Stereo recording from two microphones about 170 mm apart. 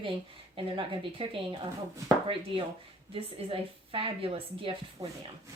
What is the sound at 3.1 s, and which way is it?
A woman's voice, 35° right (ahead or behind).